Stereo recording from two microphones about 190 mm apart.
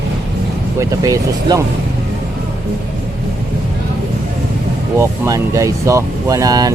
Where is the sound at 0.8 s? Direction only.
15° right (ahead or behind).